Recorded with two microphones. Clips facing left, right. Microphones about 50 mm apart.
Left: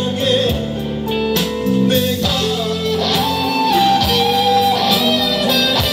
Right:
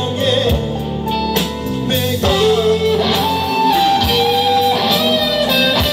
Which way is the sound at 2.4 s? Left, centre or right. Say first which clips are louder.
Right 6 dB; right.